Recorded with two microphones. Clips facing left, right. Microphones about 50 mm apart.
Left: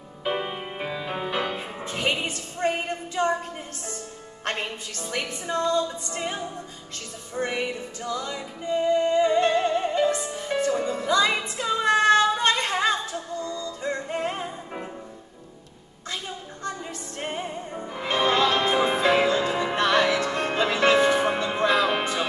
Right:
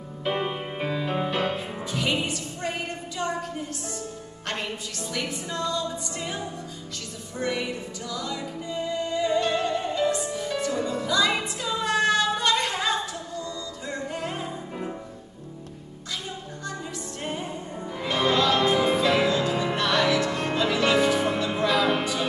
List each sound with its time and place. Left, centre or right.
0.4 s music: centre
1.9 s music: left
3.2 s a sound: left
4.5 s music: left
17.2 s music: left